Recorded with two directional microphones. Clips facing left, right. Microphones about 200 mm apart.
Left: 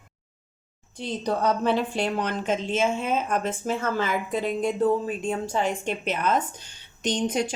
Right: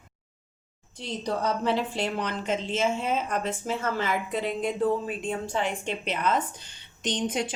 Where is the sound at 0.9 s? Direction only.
55° left (ahead or behind).